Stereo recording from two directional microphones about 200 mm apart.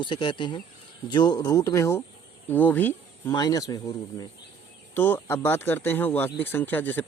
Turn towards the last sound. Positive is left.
turn(degrees=10)  # may be behind; listen again after turning